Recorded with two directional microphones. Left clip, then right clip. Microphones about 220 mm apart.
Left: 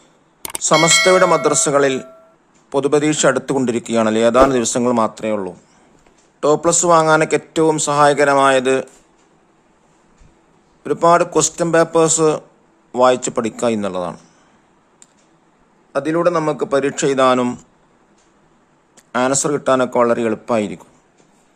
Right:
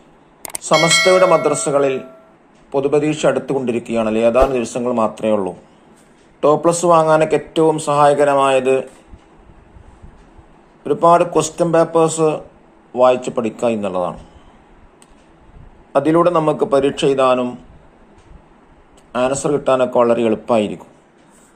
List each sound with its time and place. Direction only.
0.7 s speech: centre (ahead or behind)
1.6 s speech: 30° left (ahead or behind)
10.8 s speech: 25° left (ahead or behind)
15.9 s a man's voice: 15° left (ahead or behind)
16.3 s speech: 25° left (ahead or behind)
19.1 s speech: 25° left (ahead or behind)